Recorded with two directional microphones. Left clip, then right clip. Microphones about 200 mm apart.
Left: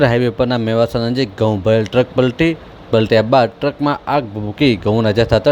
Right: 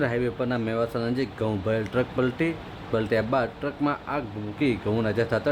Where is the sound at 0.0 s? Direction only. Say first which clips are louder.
Left 12 dB; 35° left (ahead or behind).